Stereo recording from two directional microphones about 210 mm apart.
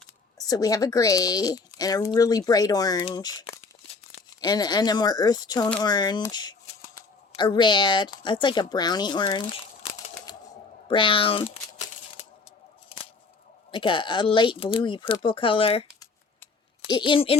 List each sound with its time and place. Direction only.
0.3 s speech: 15° left (ahead or behind)
10.3 s a sound: 20° left (ahead or behind)
10.8 s speech: 25° left (ahead or behind)
13.7 s speech: 25° left (ahead or behind)
16.0 s scissors: 20° left (ahead or behind)